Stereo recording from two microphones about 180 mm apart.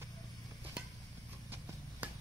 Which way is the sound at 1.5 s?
10° right (ahead or behind).